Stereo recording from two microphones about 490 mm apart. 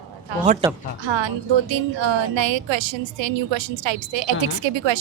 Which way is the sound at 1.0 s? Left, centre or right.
Right.